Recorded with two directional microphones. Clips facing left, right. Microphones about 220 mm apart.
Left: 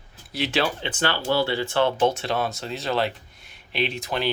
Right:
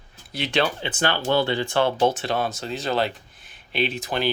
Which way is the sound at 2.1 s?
Centre (ahead or behind).